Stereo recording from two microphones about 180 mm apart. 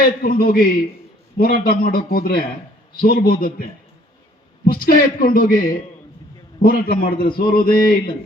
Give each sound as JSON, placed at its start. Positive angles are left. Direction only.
{"t": 0.0, "sound": "a man's voice", "side_deg": 55}